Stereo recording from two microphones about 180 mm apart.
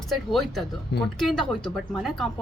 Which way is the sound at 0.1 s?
Centre (ahead or behind).